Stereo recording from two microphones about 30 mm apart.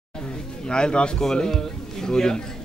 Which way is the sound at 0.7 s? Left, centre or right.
Left.